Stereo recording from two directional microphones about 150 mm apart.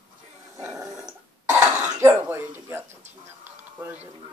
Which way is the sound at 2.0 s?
15° right (ahead or behind).